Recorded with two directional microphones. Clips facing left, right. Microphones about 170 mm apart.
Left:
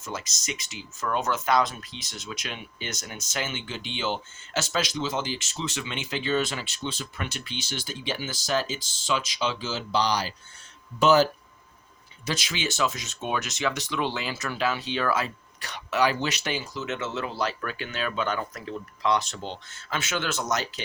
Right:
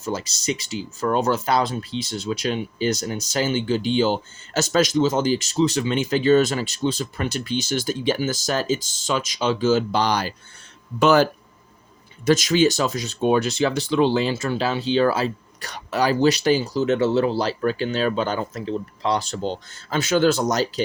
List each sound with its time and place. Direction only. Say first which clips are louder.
0.0 s speech: right 9 dB; 35° right (ahead or behind); by 11.3 s 60° right (ahead or behind)
12.2 s speech: right 14 dB; 45° right (ahead or behind)